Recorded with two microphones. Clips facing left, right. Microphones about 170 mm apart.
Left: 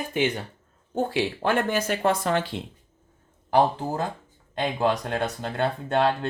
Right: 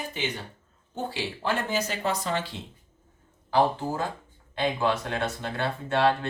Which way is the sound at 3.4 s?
45° left (ahead or behind).